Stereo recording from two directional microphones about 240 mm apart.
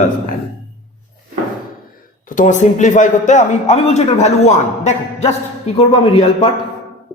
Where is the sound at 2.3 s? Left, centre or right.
Left.